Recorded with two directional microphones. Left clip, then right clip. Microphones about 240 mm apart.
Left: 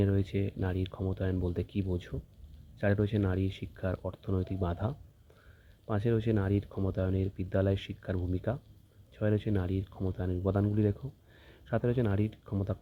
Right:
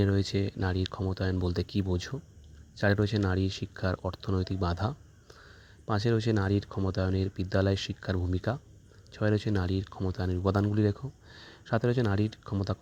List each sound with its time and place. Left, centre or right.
0.0 s speech: right